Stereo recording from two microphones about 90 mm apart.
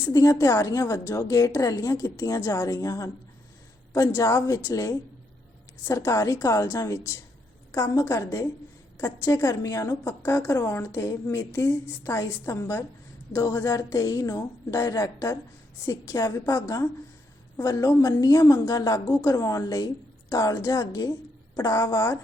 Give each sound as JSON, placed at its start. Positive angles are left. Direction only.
{"t": 0.1, "sound": "a woman's voice", "side_deg": 40}